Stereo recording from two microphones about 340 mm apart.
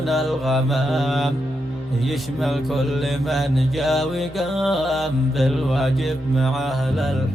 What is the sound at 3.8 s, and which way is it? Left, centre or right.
Music, centre.